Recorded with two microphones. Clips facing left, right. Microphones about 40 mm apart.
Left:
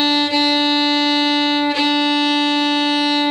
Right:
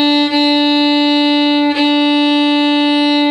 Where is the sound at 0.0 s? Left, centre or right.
Centre.